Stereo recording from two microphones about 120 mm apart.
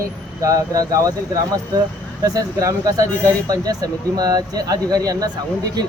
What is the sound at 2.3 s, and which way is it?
Speech, 30° right (ahead or behind).